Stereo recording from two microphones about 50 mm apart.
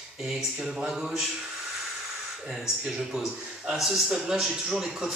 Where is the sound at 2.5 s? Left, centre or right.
Centre.